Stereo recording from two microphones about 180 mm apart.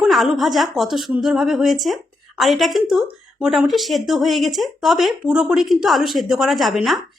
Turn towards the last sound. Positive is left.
turn(degrees=0)  # may be behind; listen again after turning